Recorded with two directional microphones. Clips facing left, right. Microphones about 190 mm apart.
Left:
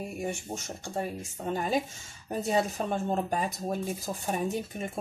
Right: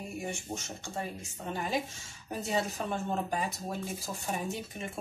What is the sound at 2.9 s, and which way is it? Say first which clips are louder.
Speech: left 4 dB; 40° left (ahead or behind).